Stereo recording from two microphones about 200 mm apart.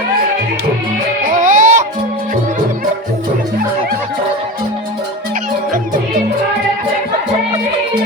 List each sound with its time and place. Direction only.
1.3 s music: 40° right (ahead or behind)